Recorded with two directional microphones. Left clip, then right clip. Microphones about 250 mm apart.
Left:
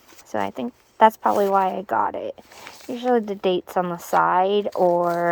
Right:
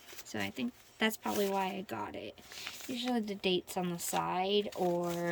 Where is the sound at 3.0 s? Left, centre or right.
Left.